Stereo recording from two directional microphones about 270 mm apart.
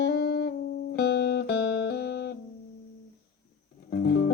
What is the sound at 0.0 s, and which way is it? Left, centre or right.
Music, left.